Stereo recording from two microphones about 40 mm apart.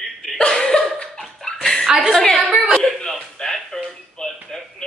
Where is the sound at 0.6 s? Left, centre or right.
Centre.